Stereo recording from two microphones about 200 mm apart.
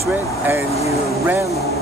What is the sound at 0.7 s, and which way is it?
Speech, 30° left (ahead or behind).